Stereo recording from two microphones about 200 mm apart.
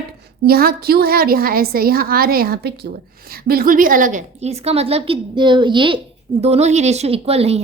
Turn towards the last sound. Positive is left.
turn(degrees=-30)  # may be behind; listen again after turning